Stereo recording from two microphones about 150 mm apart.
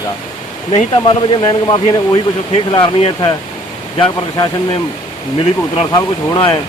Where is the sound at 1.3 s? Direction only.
30° left (ahead or behind).